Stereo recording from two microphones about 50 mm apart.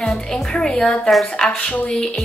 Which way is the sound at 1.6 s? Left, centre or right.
Left.